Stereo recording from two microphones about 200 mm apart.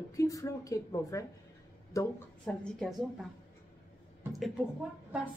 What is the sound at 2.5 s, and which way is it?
Speech, 5° left (ahead or behind).